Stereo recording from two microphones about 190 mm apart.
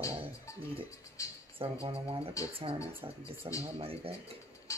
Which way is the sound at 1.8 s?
30° right (ahead or behind).